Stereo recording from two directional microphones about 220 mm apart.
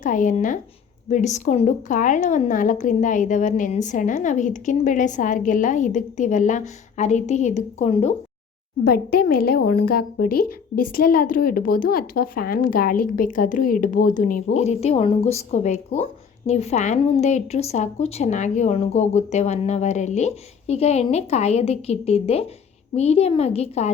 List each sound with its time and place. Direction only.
0.0 s a woman's voice: 35° left (ahead or behind)
8.8 s a woman's voice: 45° left (ahead or behind); by 23.9 s 30° left (ahead or behind)